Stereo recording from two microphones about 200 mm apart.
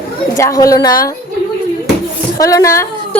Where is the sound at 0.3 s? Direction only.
15° left (ahead or behind).